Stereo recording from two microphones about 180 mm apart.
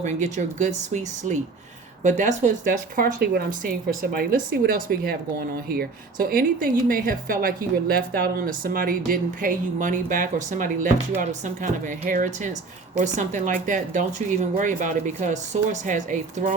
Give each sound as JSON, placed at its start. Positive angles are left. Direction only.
{"t": 0.0, "sound": "speech", "side_deg": -40}